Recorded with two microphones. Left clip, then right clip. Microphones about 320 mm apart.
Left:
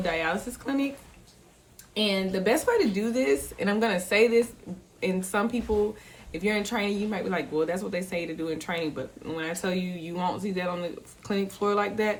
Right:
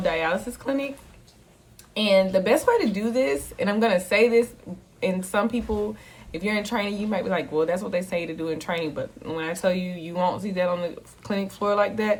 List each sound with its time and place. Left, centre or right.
0.0 s speech: centre
1.9 s speech: centre